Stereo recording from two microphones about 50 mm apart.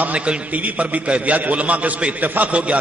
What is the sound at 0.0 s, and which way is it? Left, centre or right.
A man's voice, right.